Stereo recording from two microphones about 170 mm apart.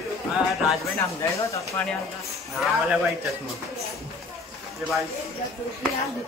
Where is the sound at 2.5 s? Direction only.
Centre (ahead or behind).